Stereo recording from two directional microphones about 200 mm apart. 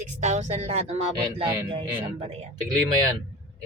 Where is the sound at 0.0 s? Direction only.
35° right (ahead or behind).